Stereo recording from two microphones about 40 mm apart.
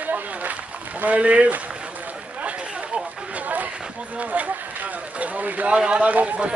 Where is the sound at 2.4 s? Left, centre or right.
Right.